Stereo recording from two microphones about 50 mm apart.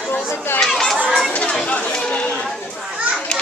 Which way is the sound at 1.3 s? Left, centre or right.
Left.